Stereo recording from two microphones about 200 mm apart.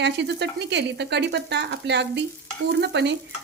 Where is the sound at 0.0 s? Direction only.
60° right (ahead or behind).